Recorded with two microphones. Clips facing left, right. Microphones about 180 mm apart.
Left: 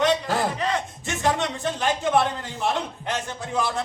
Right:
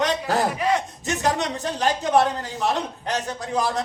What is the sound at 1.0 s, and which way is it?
Speech, 40° right (ahead or behind).